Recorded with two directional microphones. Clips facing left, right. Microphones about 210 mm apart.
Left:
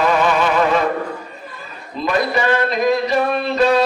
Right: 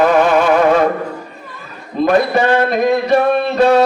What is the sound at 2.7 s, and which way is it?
Music, 55° right (ahead or behind).